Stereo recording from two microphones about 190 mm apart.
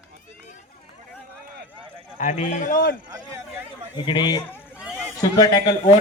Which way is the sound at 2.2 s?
40° left (ahead or behind).